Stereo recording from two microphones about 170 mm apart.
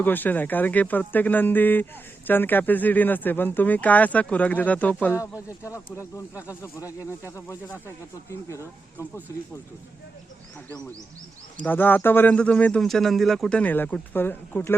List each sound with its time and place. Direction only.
0.0 s speech: 10° left (ahead or behind)
11.6 s speech: 10° left (ahead or behind)